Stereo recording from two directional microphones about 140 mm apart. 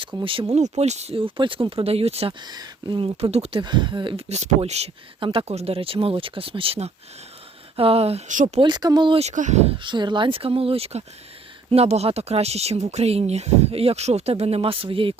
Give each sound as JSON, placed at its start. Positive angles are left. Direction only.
{"t": 0.0, "sound": "speech", "side_deg": -35}
{"t": 2.4, "sound": "speech", "side_deg": -30}
{"t": 3.2, "sound": "speech", "side_deg": -45}
{"t": 3.6, "sound": "speech", "side_deg": -35}
{"t": 4.3, "sound": "speech", "side_deg": -50}
{"t": 8.3, "sound": "speech", "side_deg": -60}
{"t": 8.6, "sound": "speech", "side_deg": -30}
{"t": 9.2, "sound": "speech", "side_deg": -60}
{"t": 9.7, "sound": "speech", "side_deg": -35}